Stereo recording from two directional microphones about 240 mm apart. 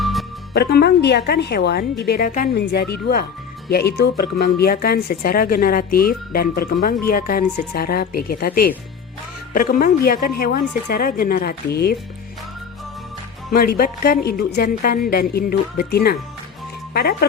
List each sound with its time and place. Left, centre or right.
0.0 s music: centre
0.5 s a woman's voice: left
13.5 s a woman's voice: left